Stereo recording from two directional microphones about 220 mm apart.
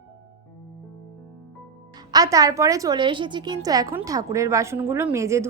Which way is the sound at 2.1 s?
15° right (ahead or behind).